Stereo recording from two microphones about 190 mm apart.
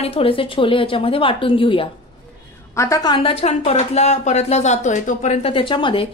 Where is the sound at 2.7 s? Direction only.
15° left (ahead or behind).